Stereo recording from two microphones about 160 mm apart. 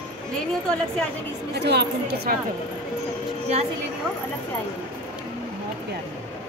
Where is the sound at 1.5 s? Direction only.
90° right.